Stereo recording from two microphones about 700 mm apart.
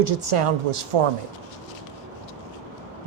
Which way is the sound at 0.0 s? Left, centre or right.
Right.